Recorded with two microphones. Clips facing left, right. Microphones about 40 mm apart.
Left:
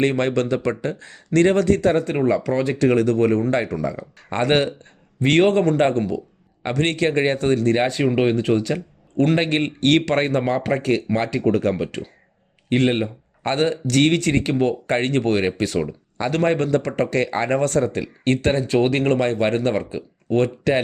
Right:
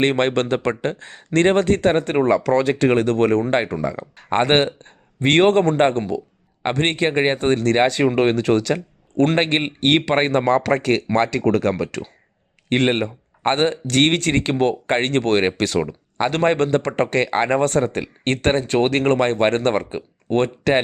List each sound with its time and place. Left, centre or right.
0.0 s speech: right
3.4 s speech: right
6.1 s a sound: right
6.7 s speech: right
7.5 s speech: right
8.7 s speech: right
9.6 s speech: right
10.2 s speech: right
10.4 s speech: right
12.6 s speech: right